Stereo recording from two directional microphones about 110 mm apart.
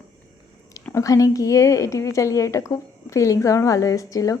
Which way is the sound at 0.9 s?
30° left (ahead or behind).